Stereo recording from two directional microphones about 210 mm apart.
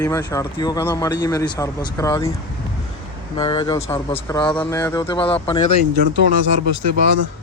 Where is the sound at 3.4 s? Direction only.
20° left (ahead or behind).